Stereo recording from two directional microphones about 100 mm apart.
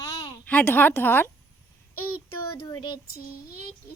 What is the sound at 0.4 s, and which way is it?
Speech, 20° left (ahead or behind).